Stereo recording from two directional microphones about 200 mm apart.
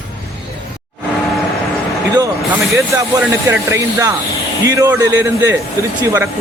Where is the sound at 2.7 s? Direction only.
15° right (ahead or behind).